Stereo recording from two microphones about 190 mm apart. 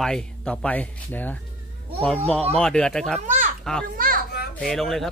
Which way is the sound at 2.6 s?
5° left (ahead or behind).